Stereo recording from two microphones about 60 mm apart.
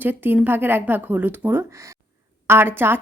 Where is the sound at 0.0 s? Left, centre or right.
Right.